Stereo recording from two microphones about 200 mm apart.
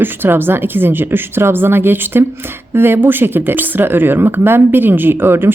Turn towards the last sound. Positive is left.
turn(degrees=-10)  # may be behind; listen again after turning